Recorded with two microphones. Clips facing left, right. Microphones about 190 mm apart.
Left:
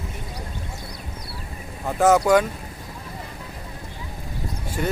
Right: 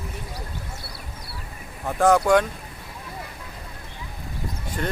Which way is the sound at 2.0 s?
5° left (ahead or behind).